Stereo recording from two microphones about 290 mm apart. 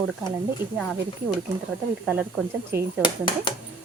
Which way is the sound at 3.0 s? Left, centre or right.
Centre.